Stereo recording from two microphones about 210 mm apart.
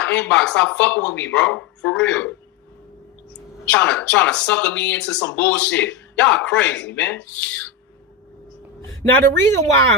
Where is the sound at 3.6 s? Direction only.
5° left (ahead or behind).